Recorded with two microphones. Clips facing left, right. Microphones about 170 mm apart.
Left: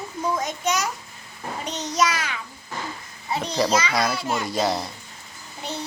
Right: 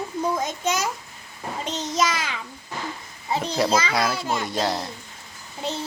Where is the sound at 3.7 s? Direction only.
30° right (ahead or behind).